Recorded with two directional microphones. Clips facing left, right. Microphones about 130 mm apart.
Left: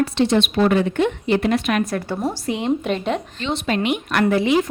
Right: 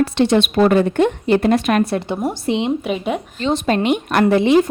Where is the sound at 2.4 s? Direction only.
25° right (ahead or behind).